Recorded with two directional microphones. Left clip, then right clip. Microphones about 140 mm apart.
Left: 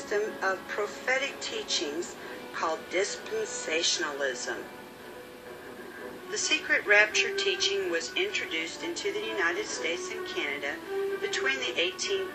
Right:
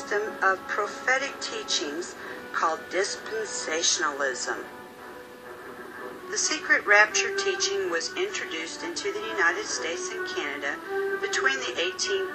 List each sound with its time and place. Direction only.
0.1 s a woman's voice: 10° left (ahead or behind)
6.3 s a woman's voice: 5° left (ahead or behind)